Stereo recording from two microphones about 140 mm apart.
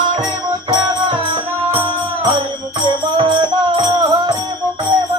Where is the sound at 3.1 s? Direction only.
35° right (ahead or behind).